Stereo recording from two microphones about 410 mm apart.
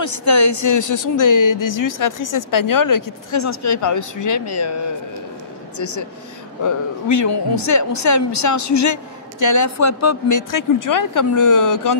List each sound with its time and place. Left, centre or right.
0.0 s a woman's voice: left
5.8 s a woman's voice: left